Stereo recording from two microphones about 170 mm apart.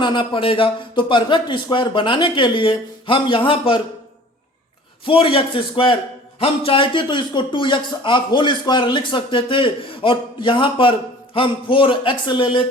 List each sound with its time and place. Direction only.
0.0 s speech: 30° left (ahead or behind)
5.0 s a man's voice: 30° left (ahead or behind)